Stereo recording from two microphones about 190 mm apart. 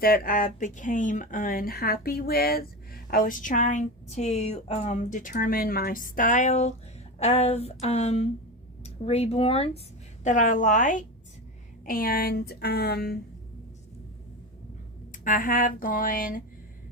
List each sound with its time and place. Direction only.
0.0 s speech: 50° left (ahead or behind); by 9.8 s 30° left (ahead or behind)
10.2 s speech: 40° left (ahead or behind)
15.1 s speech: 45° left (ahead or behind)